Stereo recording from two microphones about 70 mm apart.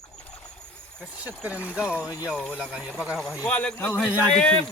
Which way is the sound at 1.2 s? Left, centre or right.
Right.